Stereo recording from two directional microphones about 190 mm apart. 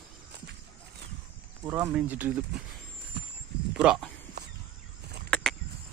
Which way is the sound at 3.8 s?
5° right (ahead or behind).